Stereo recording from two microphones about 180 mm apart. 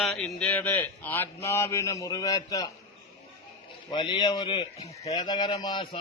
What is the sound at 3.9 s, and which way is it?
A man's voice, 25° left (ahead or behind).